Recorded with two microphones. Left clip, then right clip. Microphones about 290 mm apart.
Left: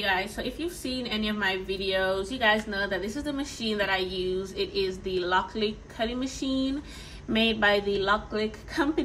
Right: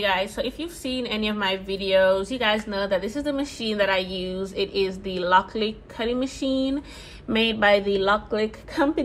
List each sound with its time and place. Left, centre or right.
0.0 s a woman's voice: centre